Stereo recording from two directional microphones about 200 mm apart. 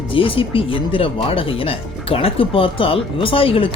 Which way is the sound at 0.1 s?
25° left (ahead or behind).